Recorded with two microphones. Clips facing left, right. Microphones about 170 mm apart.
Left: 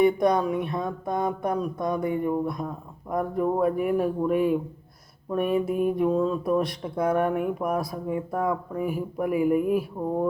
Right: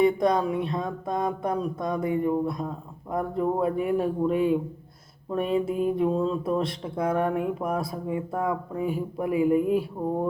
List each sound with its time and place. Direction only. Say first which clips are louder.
0.0 s speech: left 1 dB; 25° right (ahead or behind)
2.0 s speech: right 3 dB; 25° left (ahead or behind)
2.2 s speech: right 1 dB; 25° right (ahead or behind)